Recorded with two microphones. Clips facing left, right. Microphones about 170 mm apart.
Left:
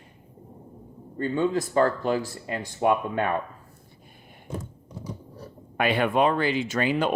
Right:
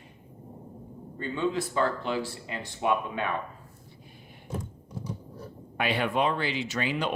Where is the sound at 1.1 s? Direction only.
45° left (ahead or behind).